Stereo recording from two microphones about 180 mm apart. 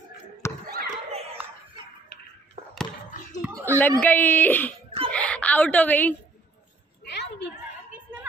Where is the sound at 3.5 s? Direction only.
20° right (ahead or behind).